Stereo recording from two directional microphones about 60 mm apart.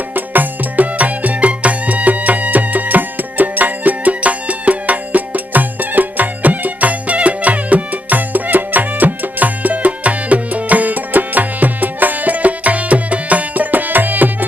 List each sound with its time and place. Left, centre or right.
0.1 s music: right